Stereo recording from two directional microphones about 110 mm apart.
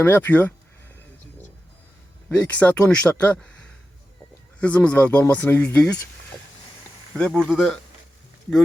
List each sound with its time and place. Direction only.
0.0 s speech: 20° left (ahead or behind)
2.3 s speech: 15° left (ahead or behind)
4.6 s speech: 10° left (ahead or behind)
7.2 s speech: 5° left (ahead or behind)